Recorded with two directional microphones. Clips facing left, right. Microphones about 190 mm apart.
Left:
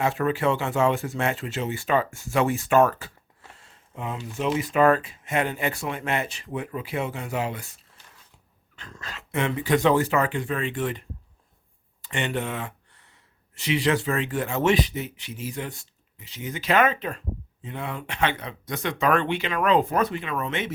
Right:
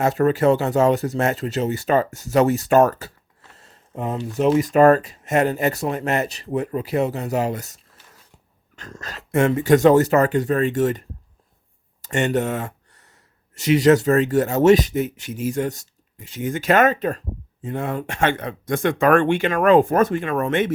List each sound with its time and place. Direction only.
0.0 s speech: 40° right (ahead or behind)
12.0 s speech: 45° right (ahead or behind)